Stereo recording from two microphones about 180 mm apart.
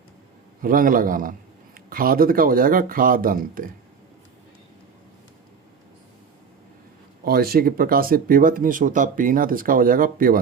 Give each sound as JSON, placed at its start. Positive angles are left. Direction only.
{"t": 0.6, "sound": "a man's voice", "side_deg": -50}
{"t": 7.3, "sound": "a man's voice", "side_deg": -60}